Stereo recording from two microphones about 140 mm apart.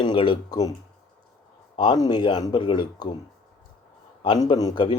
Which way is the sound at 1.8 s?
30° left (ahead or behind).